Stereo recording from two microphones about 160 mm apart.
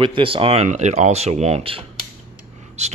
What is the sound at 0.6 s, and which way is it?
Speech, 45° right (ahead or behind).